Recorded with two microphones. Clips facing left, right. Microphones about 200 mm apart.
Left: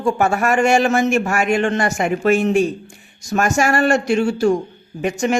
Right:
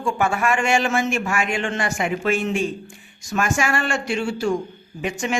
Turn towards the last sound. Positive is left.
turn(degrees=45)  # may be behind; listen again after turning